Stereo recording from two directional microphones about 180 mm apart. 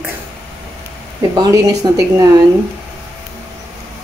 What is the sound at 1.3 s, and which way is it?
Speech, 20° right (ahead or behind).